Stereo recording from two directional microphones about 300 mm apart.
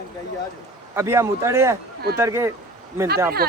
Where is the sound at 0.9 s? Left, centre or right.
Centre.